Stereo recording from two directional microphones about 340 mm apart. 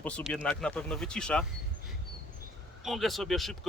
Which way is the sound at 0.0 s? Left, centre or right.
Centre.